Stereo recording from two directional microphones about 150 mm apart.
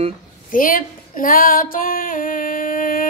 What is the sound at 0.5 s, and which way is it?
Female singing, 65° left (ahead or behind).